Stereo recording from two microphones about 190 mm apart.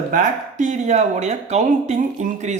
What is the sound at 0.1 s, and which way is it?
Speech, 40° right (ahead or behind).